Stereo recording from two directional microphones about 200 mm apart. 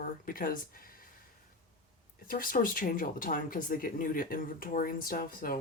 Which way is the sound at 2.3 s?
45° left (ahead or behind).